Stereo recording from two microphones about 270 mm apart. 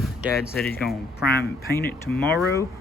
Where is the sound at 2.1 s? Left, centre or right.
Centre.